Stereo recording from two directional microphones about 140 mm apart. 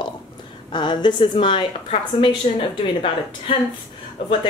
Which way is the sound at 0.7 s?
35° left (ahead or behind).